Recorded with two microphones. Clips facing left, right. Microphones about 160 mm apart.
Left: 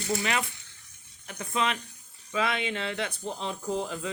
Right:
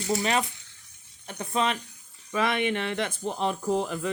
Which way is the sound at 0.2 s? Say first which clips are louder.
Right 4 dB; 35° right (ahead or behind).